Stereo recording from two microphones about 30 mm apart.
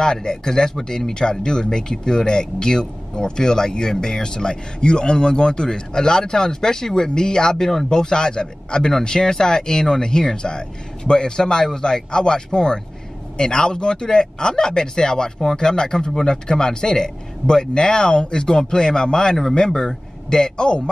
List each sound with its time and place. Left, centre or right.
0.0 s speech: left
19.7 s speech: centre; by 20.9 s left